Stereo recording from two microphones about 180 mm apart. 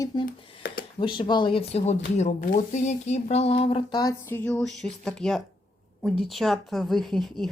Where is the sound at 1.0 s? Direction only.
25° left (ahead or behind).